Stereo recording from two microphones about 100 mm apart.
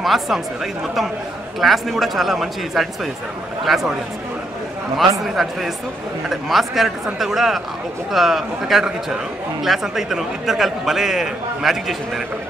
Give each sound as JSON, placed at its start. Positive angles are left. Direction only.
{"t": 0.0, "sound": "a man's voice", "side_deg": 0}
{"t": 1.6, "sound": "a man's voice", "side_deg": 0}
{"t": 5.2, "sound": "a man's voice", "side_deg": 0}